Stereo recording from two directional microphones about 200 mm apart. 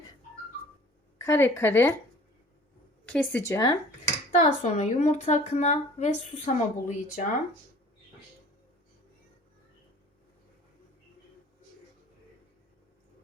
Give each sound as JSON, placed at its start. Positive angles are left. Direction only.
{"t": 1.2, "sound": "speech", "side_deg": 15}
{"t": 3.1, "sound": "speech", "side_deg": 5}
{"t": 4.3, "sound": "speech", "side_deg": 40}